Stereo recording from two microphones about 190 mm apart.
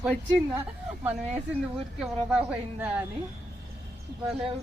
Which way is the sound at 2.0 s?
5° right (ahead or behind).